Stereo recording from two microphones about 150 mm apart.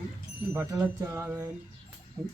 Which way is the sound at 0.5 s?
15° right (ahead or behind).